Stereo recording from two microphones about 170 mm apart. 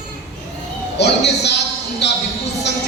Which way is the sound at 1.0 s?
85° left.